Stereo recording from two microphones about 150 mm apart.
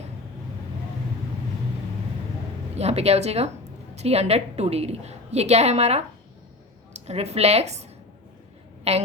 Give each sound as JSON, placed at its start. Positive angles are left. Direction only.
{"t": 2.7, "sound": "a woman's voice", "side_deg": -45}
{"t": 8.8, "sound": "a woman's voice", "side_deg": -45}